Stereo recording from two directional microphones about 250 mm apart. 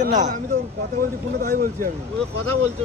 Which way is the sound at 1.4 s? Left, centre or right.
Right.